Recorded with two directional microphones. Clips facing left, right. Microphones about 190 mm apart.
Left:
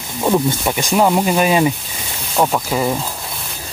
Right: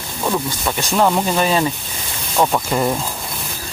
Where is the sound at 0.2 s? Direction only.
20° left (ahead or behind); by 3.0 s centre (ahead or behind).